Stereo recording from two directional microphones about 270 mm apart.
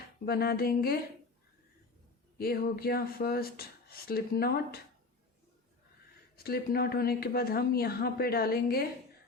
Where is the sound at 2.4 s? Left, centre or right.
Left.